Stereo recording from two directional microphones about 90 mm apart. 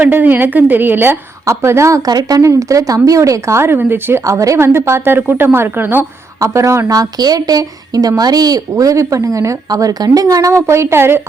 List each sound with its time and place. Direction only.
0.0 s a woman's voice: 20° right (ahead or behind)
2.0 s a woman's voice: 45° right (ahead or behind); by 4.2 s 25° right (ahead or behind)
4.2 s speech: 40° right (ahead or behind)
6.4 s a woman's voice: 35° right (ahead or behind)